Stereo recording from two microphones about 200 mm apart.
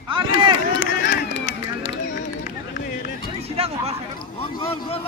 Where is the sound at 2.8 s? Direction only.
45° left (ahead or behind).